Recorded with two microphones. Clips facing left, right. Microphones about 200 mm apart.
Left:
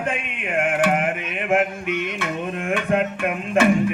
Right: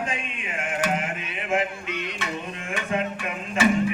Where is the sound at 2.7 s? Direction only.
60° left (ahead or behind).